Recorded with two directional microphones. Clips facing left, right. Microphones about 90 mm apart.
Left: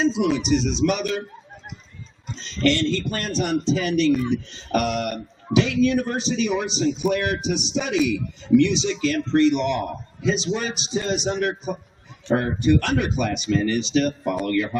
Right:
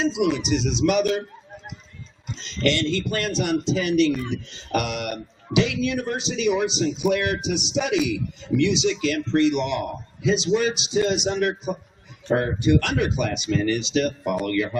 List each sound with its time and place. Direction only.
0.0 s a man's voice: 35° left (ahead or behind)
2.3 s a man's voice: 40° left (ahead or behind)
4.1 s speech: centre (ahead or behind)
4.5 s a man's voice: 40° left (ahead or behind)